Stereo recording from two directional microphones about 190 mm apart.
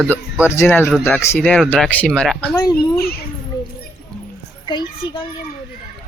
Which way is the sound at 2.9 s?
55° left (ahead or behind).